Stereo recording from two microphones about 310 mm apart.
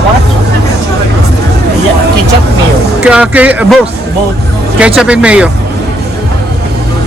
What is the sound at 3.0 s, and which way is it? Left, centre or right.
Speech, centre.